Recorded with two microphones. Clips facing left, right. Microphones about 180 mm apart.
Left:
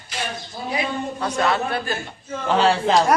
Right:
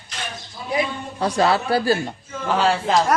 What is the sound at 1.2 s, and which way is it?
Speech, 30° right (ahead or behind).